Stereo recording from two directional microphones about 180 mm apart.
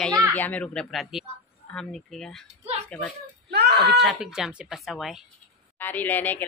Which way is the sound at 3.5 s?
65° right (ahead or behind).